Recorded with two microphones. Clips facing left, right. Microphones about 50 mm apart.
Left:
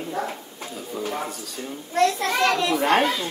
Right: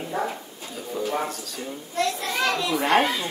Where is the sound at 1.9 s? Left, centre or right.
Left.